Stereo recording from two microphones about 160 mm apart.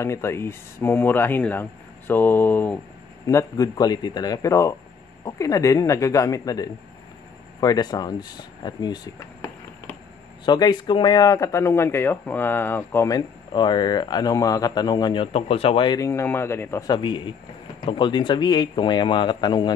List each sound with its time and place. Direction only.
0.0 s a man's voice: 15° left (ahead or behind)
10.4 s speech: 25° left (ahead or behind)
13.5 s a man's voice: 30° left (ahead or behind)
16.1 s speech: 15° left (ahead or behind)
16.9 s a man's voice: 30° left (ahead or behind)